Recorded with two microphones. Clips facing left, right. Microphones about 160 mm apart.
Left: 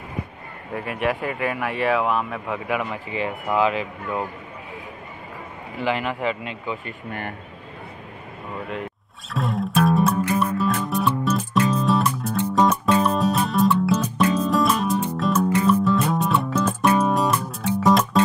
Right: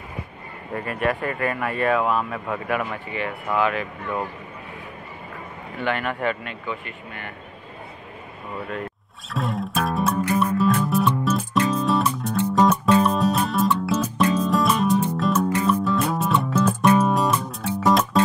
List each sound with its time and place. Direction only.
0.7 s speech: 5° left (ahead or behind)
3.4 s speech: 20° left (ahead or behind)
4.0 s speech: 10° left (ahead or behind)
5.8 s speech: 5° left (ahead or behind)
7.1 s speech: 45° left (ahead or behind)
9.3 s music: centre (ahead or behind)